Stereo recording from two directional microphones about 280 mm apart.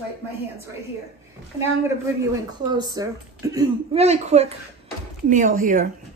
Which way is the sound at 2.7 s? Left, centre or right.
Centre.